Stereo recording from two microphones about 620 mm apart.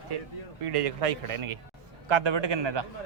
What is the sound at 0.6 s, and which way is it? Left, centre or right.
A man's voice, right.